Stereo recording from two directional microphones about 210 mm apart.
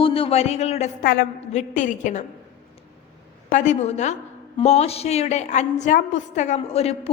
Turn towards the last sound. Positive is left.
turn(degrees=30)  # may be behind; listen again after turning